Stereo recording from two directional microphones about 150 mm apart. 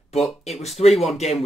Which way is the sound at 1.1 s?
45° left (ahead or behind).